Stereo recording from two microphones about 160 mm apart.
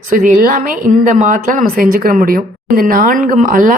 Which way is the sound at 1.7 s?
65° right (ahead or behind).